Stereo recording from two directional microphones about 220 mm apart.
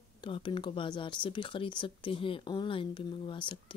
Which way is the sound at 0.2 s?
20° left (ahead or behind).